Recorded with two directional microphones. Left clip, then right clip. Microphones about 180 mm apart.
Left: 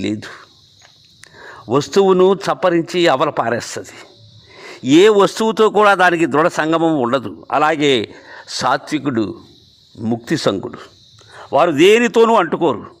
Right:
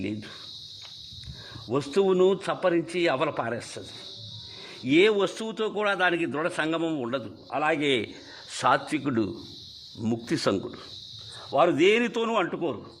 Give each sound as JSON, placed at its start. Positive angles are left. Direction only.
{"t": 0.0, "sound": "a man's voice", "side_deg": 40}
{"t": 1.5, "sound": "a man's voice", "side_deg": 40}
{"t": 11.3, "sound": "speech", "side_deg": 50}